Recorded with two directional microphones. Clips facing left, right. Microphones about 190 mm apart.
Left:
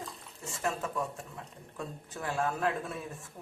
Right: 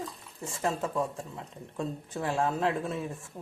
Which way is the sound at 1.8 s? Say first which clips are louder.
Right 6 dB; 25° right (ahead or behind).